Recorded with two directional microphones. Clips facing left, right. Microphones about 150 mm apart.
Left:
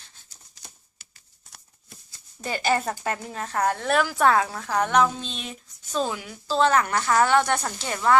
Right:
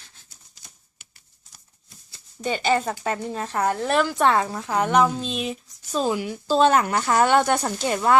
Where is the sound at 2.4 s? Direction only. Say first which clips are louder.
Right 2 dB; 5° left (ahead or behind).